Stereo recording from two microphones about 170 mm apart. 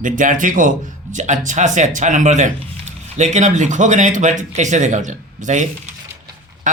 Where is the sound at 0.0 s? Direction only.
50° right (ahead or behind).